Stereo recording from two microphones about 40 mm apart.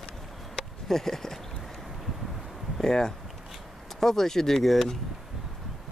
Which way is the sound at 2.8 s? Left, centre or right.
Centre.